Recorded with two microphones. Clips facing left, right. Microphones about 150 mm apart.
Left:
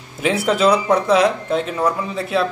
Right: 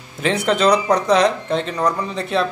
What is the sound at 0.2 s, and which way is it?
Speech, 5° left (ahead or behind).